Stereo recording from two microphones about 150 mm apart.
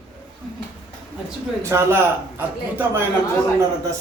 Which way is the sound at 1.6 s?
15° right (ahead or behind).